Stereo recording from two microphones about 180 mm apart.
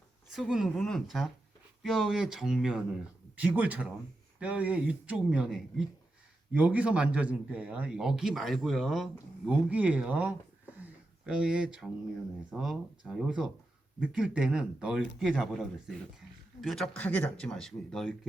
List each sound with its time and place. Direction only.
0.3 s a man's voice: 5° right (ahead or behind)